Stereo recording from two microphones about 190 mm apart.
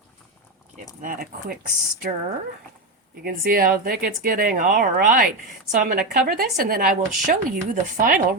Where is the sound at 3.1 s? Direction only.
50° right (ahead or behind).